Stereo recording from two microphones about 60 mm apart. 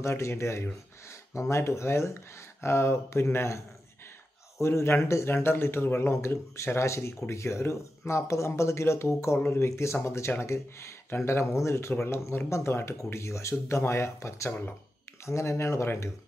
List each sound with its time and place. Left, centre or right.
0.0 s speech: left
9.4 s speech: left
9.7 s speech: left